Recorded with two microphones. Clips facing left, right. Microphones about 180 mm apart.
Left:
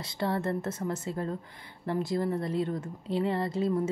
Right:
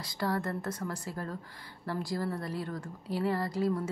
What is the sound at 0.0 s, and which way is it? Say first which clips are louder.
A woman's voice: left 2 dB; 25° left (ahead or behind).